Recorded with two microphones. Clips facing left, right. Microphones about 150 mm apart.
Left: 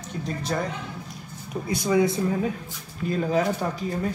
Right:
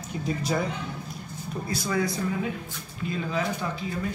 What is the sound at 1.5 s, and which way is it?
Speech, 15° left (ahead or behind).